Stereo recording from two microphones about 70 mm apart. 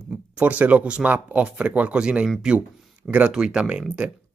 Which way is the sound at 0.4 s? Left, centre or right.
Right.